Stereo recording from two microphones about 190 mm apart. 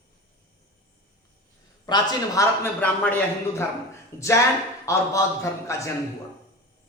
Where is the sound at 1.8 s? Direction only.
20° left (ahead or behind).